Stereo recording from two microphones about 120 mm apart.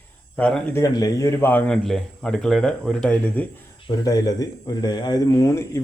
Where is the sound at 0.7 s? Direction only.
30° left (ahead or behind).